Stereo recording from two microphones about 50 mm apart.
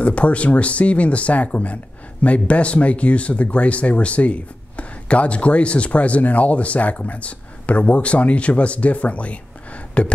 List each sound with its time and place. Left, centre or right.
0.0 s speech: left